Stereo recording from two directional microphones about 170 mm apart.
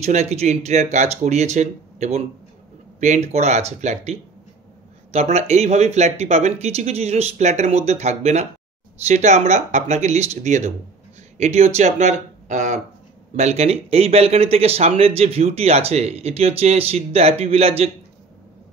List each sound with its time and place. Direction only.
0.0 s speech: 40° right (ahead or behind)